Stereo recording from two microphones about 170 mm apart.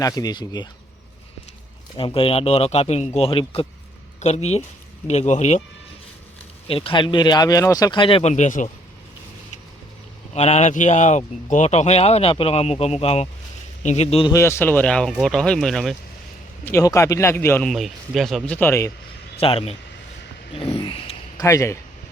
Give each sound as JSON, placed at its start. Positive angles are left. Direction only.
{"t": 0.0, "sound": "speech", "side_deg": 25}
{"t": 2.0, "sound": "speech", "side_deg": 30}
{"t": 6.7, "sound": "speech", "side_deg": 35}
{"t": 10.3, "sound": "speech", "side_deg": 40}
{"t": 14.3, "sound": "speech", "side_deg": 15}
{"t": 16.6, "sound": "speech", "side_deg": 15}
{"t": 17.7, "sound": "speech", "side_deg": 0}
{"t": 19.4, "sound": "speech", "side_deg": 35}
{"t": 20.6, "sound": "a sound", "side_deg": 35}
{"t": 21.4, "sound": "speech", "side_deg": 15}